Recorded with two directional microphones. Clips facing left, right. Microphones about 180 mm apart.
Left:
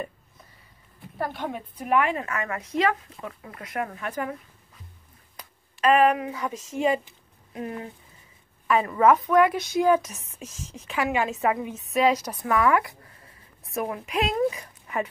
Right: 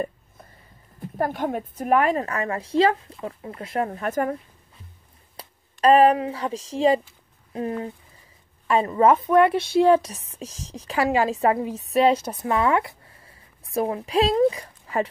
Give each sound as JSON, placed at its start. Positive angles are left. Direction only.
{"t": 0.9, "sound": "a woman's voice", "side_deg": -45}
{"t": 5.4, "sound": "a woman's voice", "side_deg": -35}